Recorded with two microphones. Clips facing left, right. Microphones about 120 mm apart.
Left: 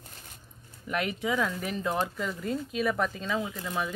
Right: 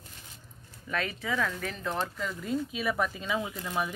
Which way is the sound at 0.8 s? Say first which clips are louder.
Left 3 dB; 15° left (ahead or behind).